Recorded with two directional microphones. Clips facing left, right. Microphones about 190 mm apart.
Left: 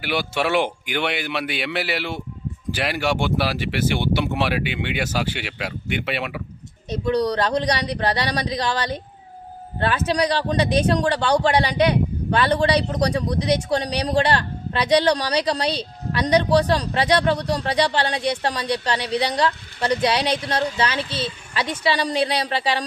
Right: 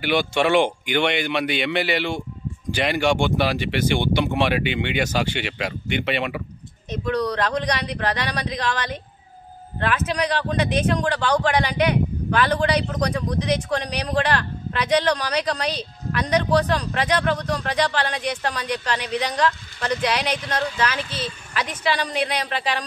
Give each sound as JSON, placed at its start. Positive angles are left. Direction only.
{"t": 0.0, "sound": "speech", "side_deg": 5}
{"t": 6.9, "sound": "a man's voice", "side_deg": 35}